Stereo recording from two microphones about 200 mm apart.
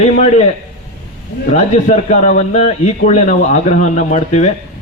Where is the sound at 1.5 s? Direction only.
35° left (ahead or behind).